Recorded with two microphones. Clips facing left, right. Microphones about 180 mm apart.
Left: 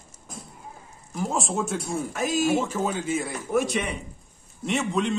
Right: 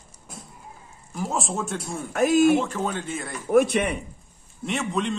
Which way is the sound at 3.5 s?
60° right (ahead or behind).